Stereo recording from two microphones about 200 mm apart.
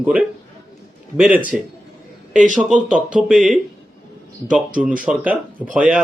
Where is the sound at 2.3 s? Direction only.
40° right (ahead or behind).